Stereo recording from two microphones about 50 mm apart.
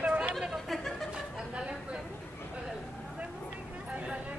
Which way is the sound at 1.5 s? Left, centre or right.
Centre.